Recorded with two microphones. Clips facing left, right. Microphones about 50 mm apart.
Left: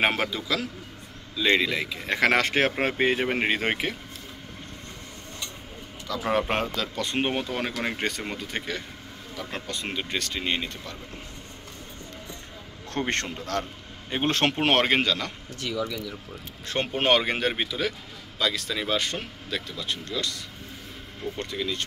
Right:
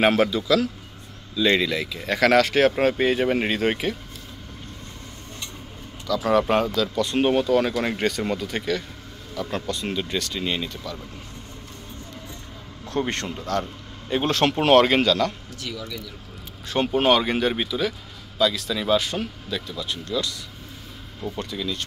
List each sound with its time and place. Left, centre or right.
0.0 s speech: centre
6.0 s speech: left
13.1 s speech: left
14.0 s a man's voice: left
16.6 s speech: left